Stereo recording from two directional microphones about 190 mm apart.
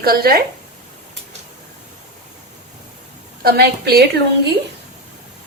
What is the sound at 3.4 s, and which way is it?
Speech, 55° right (ahead or behind).